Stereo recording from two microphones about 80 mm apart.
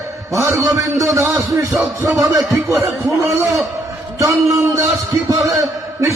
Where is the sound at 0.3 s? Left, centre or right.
Right.